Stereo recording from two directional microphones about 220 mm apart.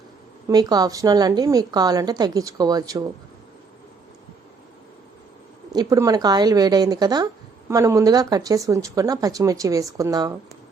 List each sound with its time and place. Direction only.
0.4 s a woman's voice: 20° right (ahead or behind)
5.7 s a woman's voice: 15° right (ahead or behind)